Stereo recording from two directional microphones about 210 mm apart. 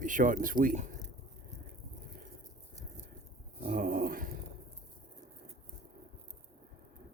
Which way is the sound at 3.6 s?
40° right (ahead or behind).